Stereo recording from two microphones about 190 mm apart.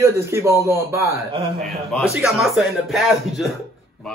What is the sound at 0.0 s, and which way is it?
A man's voice, 15° right (ahead or behind).